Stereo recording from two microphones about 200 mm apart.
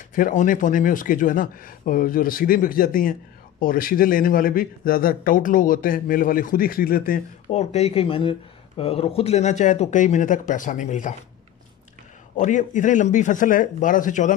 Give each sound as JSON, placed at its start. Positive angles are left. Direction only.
{"t": 0.1, "sound": "speech", "side_deg": 40}
{"t": 12.4, "sound": "speech", "side_deg": 40}